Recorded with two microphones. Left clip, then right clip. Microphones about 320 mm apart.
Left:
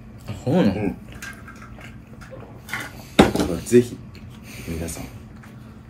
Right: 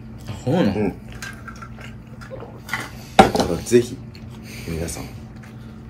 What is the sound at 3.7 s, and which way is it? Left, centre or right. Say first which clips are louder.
Speech: even; centre.